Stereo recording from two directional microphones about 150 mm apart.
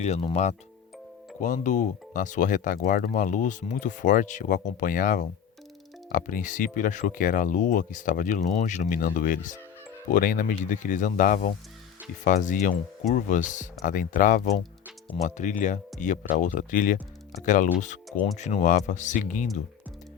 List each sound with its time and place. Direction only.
0.0 s speech: 45° left (ahead or behind)
1.4 s speech: 55° left (ahead or behind)